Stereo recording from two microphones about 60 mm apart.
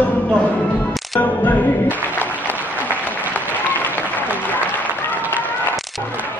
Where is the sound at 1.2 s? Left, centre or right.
Left.